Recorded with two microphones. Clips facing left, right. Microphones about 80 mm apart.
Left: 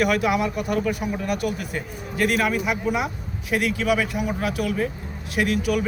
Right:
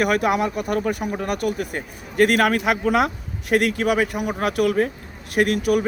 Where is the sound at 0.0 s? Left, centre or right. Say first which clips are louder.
Right 1 dB; right.